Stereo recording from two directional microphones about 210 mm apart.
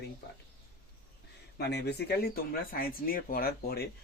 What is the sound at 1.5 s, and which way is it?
Speech, 50° left (ahead or behind).